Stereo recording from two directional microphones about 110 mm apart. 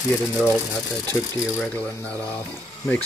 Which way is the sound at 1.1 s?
30° left (ahead or behind).